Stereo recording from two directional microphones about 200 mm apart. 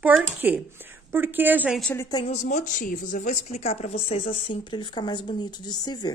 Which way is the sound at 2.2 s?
35° left (ahead or behind).